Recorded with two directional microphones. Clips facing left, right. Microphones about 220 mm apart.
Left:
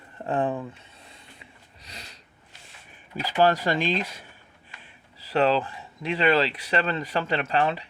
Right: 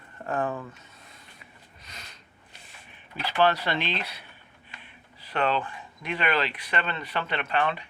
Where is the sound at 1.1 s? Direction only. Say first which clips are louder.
Left 2 dB; 30° left (ahead or behind).